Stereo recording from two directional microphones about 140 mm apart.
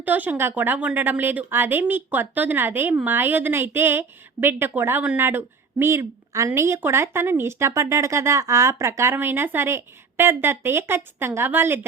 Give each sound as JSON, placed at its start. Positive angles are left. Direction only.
{"t": 0.0, "sound": "a woman's voice", "side_deg": -10}